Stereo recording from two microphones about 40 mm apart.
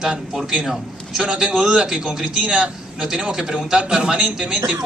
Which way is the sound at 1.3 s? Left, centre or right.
Centre.